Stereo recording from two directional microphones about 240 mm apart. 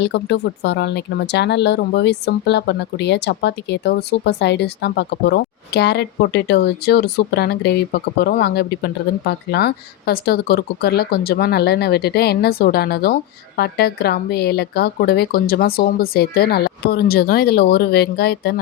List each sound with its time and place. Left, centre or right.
0.0 s speech: left